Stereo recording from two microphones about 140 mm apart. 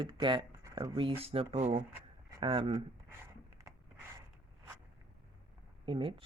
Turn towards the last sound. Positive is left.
turn(degrees=-40)  # may be behind; listen again after turning